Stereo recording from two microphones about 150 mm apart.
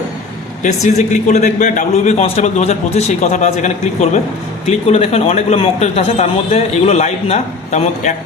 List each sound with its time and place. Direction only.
0.6 s a man's voice: 50° left (ahead or behind)